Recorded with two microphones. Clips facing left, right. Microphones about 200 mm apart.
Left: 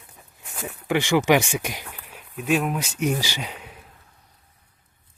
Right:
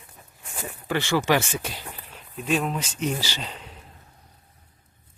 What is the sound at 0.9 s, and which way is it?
Speech, 15° left (ahead or behind).